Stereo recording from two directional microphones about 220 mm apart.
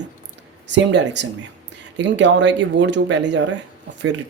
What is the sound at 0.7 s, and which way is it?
Speech, 55° right (ahead or behind).